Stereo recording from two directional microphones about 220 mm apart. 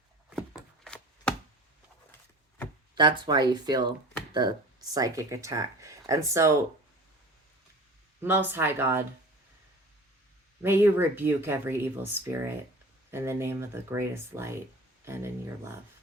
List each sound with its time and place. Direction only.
0.9 s chopping: 5° left (ahead or behind)
2.9 s speech: 20° right (ahead or behind)
4.9 s speech: 15° right (ahead or behind)
8.2 s speech: 10° right (ahead or behind)
10.6 s speech: 10° right (ahead or behind)